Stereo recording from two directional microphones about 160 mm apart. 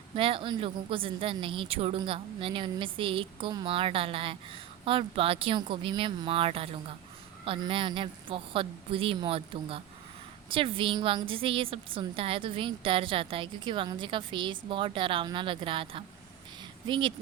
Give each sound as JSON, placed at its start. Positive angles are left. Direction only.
{"t": 0.2, "sound": "a woman's voice", "side_deg": -35}